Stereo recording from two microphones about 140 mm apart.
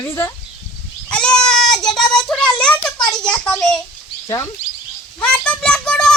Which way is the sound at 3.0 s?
5° left (ahead or behind).